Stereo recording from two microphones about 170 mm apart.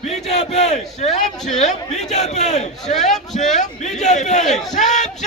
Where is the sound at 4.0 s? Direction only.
45° left (ahead or behind).